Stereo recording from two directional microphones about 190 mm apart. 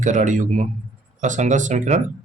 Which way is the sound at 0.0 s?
40° right (ahead or behind).